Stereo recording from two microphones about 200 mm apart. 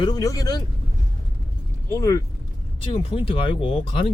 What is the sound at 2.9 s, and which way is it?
Speech, 30° left (ahead or behind).